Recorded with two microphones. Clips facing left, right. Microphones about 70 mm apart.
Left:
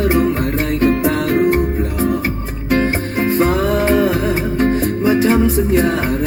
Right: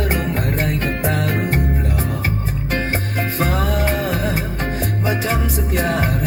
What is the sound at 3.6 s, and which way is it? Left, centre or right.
Music, left.